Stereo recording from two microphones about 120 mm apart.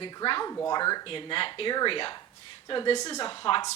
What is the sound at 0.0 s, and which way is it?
Speech, 40° left (ahead or behind).